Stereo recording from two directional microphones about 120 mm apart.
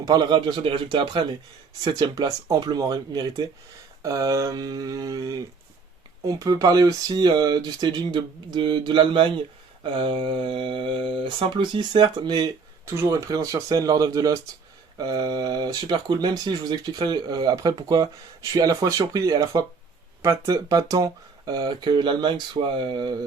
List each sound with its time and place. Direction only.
0.0 s speech: 35° right (ahead or behind)
12.8 s speech: 20° right (ahead or behind); by 23.1 s 40° right (ahead or behind)